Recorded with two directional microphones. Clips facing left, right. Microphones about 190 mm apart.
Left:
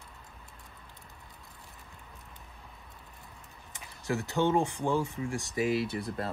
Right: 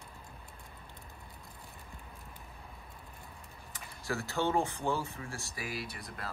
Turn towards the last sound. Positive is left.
turn(degrees=30)  # may be behind; listen again after turning